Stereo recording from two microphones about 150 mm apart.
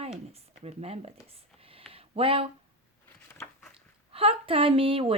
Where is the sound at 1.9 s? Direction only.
40° right (ahead or behind).